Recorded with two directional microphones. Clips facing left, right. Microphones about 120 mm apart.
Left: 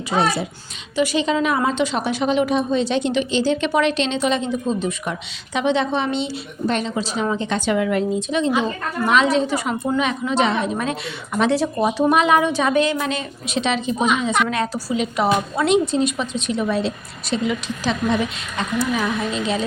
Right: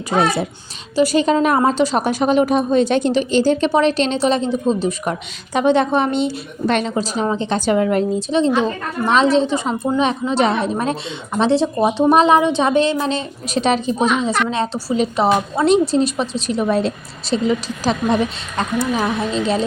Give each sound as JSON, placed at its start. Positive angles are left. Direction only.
{"t": 0.1, "sound": "a woman's voice", "side_deg": -50}
{"t": 0.9, "sound": "a woman's voice", "side_deg": -40}
{"t": 3.7, "sound": "a woman's voice", "side_deg": -35}
{"t": 5.5, "sound": "a woman's voice", "side_deg": -45}
{"t": 17.2, "sound": "a woman's voice", "side_deg": -35}